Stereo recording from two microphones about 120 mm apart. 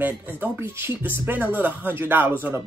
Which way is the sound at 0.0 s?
15° right (ahead or behind).